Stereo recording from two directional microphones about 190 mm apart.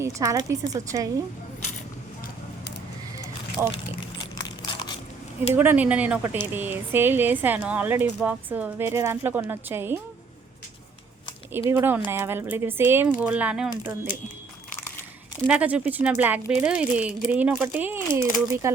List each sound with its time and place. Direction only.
0.0 s speech: 15° right (ahead or behind)
3.6 s speech: 10° right (ahead or behind)
4.2 s a sound: 20° left (ahead or behind)
5.5 s speech: 10° right (ahead or behind)
11.7 s speech: 10° right (ahead or behind)
15.4 s speech: 5° right (ahead or behind)